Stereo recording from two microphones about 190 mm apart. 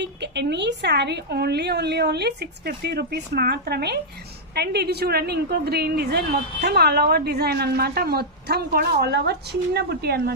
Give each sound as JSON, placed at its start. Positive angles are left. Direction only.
{"t": 0.0, "sound": "a woman's voice", "side_deg": -65}